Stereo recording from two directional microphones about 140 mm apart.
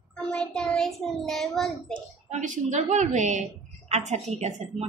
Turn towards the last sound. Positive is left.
turn(degrees=-50)  # may be behind; listen again after turning